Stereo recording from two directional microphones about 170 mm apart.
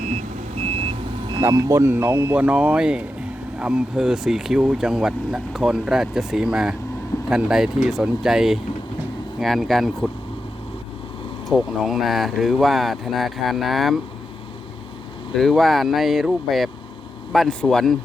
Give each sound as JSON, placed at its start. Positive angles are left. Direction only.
{"t": 0.0, "sound": "reversing beeps", "side_deg": -40}
{"t": 1.4, "sound": "speech", "side_deg": -20}
{"t": 11.4, "sound": "speech", "side_deg": 0}
{"t": 15.4, "sound": "speech", "side_deg": 0}